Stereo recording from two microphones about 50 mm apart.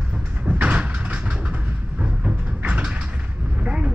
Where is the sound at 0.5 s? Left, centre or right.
Right.